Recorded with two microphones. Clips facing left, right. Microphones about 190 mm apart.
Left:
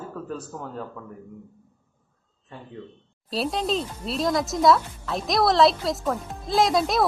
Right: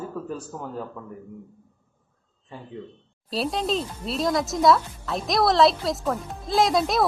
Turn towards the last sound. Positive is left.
turn(degrees=0)  # may be behind; listen again after turning